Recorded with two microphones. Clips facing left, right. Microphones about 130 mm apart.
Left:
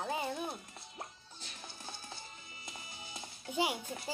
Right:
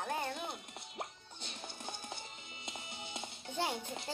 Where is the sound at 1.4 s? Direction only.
25° right (ahead or behind).